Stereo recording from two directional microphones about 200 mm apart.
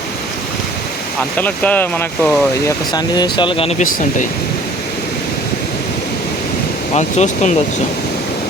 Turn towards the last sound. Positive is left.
turn(degrees=35)  # may be behind; listen again after turning